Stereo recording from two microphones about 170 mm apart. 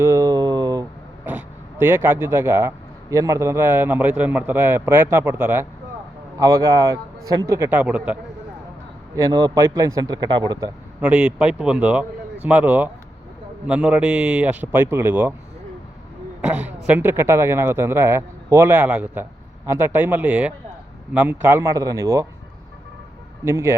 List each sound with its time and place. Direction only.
0.0 s a sound: 20° right (ahead or behind)
1.2 s a man's voice: 10° right (ahead or behind)
9.1 s a man's voice: 20° right (ahead or behind)
11.0 s speech: 5° right (ahead or behind)
16.6 s speech: 10° right (ahead or behind)
23.5 s speech: 15° right (ahead or behind)